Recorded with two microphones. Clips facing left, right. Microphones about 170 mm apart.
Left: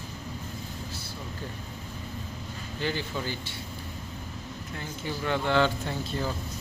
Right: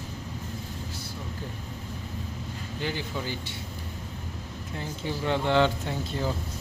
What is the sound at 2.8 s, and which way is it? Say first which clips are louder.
Speech: left 1 dB; 15° right (ahead or behind).